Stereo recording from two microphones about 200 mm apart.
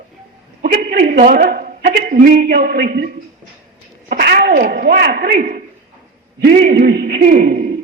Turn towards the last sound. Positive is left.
turn(degrees=-50)  # may be behind; listen again after turning